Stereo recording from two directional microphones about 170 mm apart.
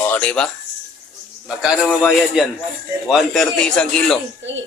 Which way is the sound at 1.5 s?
5° right (ahead or behind).